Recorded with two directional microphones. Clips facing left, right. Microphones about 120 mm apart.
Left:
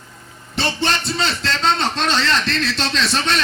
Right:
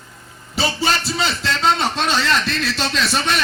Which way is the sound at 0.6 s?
5° right (ahead or behind).